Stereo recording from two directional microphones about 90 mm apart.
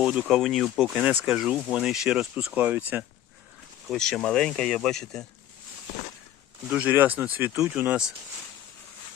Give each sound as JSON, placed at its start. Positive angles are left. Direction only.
{"t": 0.0, "sound": "speech", "side_deg": -10}
{"t": 1.0, "sound": "speech", "side_deg": -10}
{"t": 2.6, "sound": "speech", "side_deg": -20}
{"t": 3.8, "sound": "speech", "side_deg": 5}
{"t": 6.7, "sound": "speech", "side_deg": -15}